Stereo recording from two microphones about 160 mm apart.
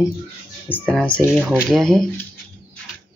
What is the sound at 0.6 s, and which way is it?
Speech, 10° left (ahead or behind).